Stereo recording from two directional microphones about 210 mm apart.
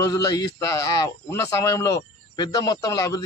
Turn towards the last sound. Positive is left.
turn(degrees=15)  # may be behind; listen again after turning